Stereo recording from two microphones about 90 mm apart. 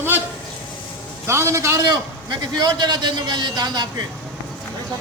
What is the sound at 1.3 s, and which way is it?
Speech, 30° right (ahead or behind).